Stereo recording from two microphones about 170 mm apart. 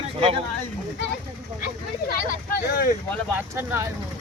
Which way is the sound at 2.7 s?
65° left (ahead or behind).